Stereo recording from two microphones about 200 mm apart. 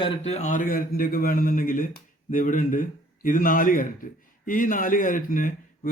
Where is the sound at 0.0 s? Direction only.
30° left (ahead or behind).